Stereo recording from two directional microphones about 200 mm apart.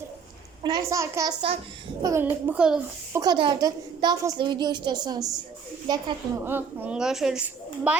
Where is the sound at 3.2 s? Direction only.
20° right (ahead or behind).